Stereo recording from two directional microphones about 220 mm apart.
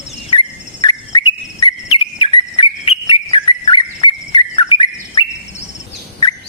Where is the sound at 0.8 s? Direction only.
20° left (ahead or behind).